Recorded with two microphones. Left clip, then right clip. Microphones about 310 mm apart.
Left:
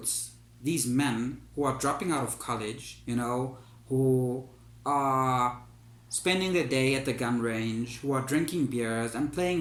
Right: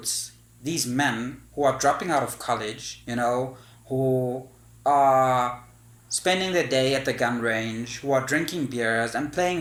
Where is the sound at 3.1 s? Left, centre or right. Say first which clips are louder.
Right 7 dB; right.